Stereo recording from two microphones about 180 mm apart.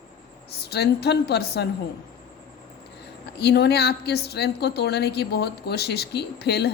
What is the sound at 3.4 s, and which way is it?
A woman's voice, 65° left (ahead or behind).